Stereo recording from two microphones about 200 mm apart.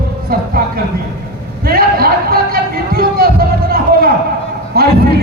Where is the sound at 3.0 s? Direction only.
50° right (ahead or behind).